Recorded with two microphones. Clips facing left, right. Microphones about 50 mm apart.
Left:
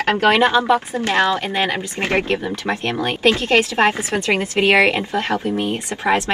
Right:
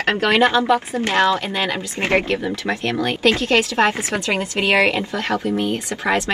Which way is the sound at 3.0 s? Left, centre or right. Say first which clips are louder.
Left 1 dB; left.